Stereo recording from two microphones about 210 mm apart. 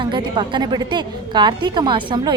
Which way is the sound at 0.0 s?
20° right (ahead or behind).